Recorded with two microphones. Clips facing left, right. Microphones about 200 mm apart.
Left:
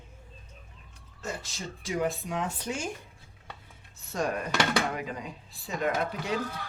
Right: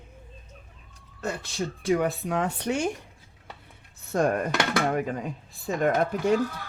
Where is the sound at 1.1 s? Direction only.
65° right (ahead or behind).